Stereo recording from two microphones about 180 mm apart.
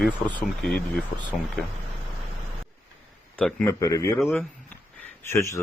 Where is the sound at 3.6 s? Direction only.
15° left (ahead or behind).